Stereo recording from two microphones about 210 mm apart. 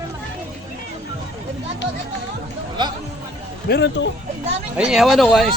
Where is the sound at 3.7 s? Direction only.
55° left (ahead or behind).